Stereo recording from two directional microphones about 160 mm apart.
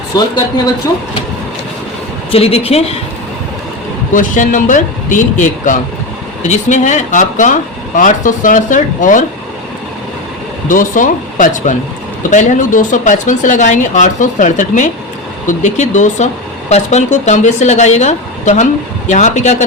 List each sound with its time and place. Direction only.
2.3 s a woman's voice: 40° left (ahead or behind)
4.1 s a man's voice: 55° left (ahead or behind)
10.7 s a man's voice: 55° left (ahead or behind)